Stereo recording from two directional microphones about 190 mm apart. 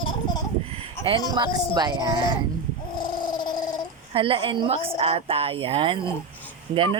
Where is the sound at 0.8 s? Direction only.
25° right (ahead or behind).